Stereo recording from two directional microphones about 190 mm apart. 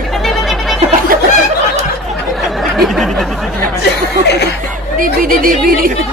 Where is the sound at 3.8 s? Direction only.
60° left (ahead or behind).